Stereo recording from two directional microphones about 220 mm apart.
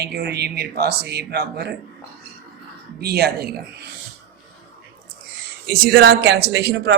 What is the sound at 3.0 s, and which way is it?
Speech, 45° right (ahead or behind).